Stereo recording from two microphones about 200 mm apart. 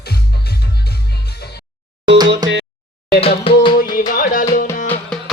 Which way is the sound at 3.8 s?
45° left (ahead or behind).